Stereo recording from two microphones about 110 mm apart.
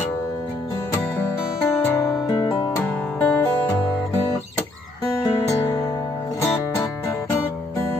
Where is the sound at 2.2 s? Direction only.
45° left (ahead or behind).